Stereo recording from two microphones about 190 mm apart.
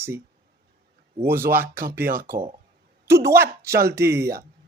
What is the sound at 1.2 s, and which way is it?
A woman's voice, 10° right (ahead or behind).